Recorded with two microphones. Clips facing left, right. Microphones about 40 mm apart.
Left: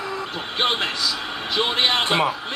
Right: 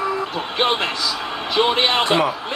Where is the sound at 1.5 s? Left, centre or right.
Centre.